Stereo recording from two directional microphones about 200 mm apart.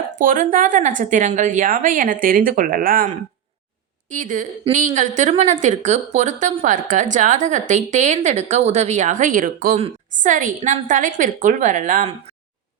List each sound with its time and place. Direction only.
0.2 s a woman's voice: 40° right (ahead or behind)
4.1 s a woman's voice: 40° right (ahead or behind)